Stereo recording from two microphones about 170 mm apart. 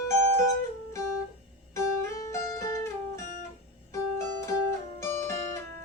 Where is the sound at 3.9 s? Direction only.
15° left (ahead or behind).